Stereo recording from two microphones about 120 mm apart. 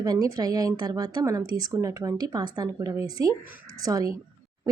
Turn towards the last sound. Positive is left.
turn(degrees=-30)  # may be behind; listen again after turning